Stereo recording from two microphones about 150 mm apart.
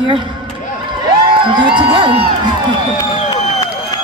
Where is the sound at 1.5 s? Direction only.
35° right (ahead or behind).